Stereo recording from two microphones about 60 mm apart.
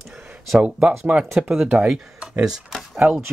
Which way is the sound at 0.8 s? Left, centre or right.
Centre.